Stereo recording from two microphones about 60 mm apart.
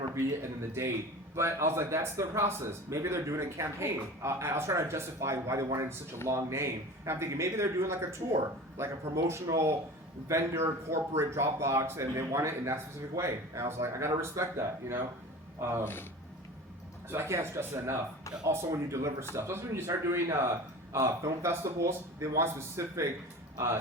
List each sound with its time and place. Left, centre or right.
1.4 s speech: right
9.5 s speech: right
10.2 s speech: right
17.1 s speech: right